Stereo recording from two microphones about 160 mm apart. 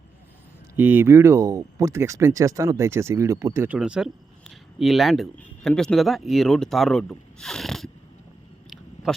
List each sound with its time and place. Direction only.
0.8 s speech: 10° right (ahead or behind)
3.8 s speech: 5° right (ahead or behind)